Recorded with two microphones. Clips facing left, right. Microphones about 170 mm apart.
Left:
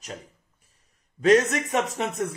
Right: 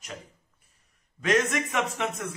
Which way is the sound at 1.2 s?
35° left (ahead or behind).